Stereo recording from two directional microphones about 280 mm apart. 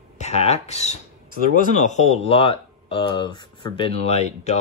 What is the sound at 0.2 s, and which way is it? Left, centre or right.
Speech, left.